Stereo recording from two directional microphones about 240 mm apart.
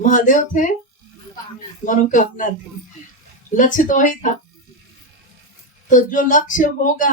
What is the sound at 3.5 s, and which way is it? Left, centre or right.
Speech, left.